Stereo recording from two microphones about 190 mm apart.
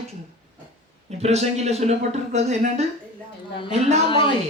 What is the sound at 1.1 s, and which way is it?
Speech, 35° right (ahead or behind).